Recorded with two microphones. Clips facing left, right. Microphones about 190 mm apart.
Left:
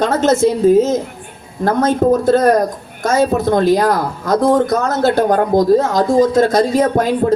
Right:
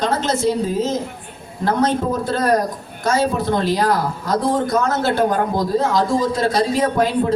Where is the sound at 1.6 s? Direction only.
45° left (ahead or behind).